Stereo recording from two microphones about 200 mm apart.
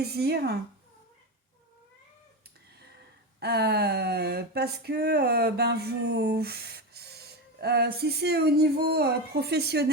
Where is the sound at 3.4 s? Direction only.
55° right (ahead or behind).